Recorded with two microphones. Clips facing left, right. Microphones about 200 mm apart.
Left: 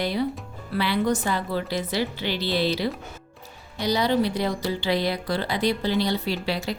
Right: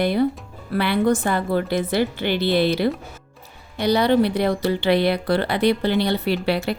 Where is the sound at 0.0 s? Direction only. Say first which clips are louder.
Right 6 dB; 55° right (ahead or behind).